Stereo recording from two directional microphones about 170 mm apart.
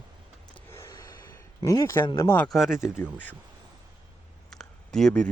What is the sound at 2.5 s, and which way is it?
Speech, centre (ahead or behind).